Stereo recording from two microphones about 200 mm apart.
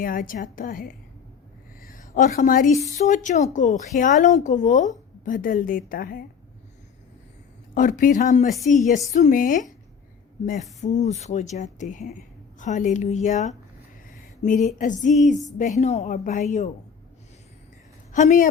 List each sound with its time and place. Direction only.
0.0 s a woman's voice: 45° left (ahead or behind)
7.7 s speech: 40° left (ahead or behind)
8.4 s a woman's voice: centre (ahead or behind)
8.7 s speech: 40° left (ahead or behind)
10.8 s speech: 35° left (ahead or behind)
18.1 s a woman's voice: 40° left (ahead or behind)